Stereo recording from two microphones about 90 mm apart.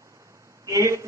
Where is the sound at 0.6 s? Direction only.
35° right (ahead or behind).